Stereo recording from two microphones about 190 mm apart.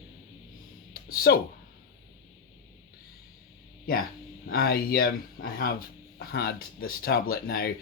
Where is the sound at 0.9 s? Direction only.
50° left (ahead or behind).